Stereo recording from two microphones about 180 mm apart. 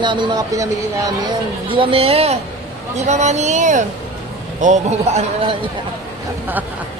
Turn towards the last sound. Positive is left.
turn(degrees=-40)  # may be behind; listen again after turning